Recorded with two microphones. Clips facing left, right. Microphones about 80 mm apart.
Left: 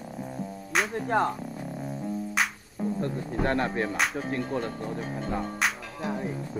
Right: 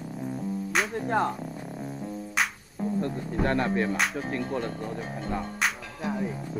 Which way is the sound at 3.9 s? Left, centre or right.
Centre.